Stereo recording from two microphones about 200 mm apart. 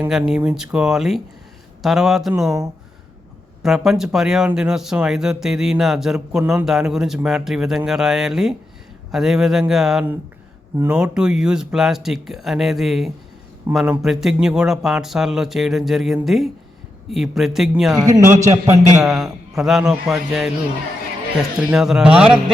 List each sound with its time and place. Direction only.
0.0 s speech: 5° right (ahead or behind)
3.6 s speech: centre (ahead or behind)
17.9 s a man's voice: 20° right (ahead or behind)
19.0 s speech: centre (ahead or behind)
21.6 s speech: 5° right (ahead or behind)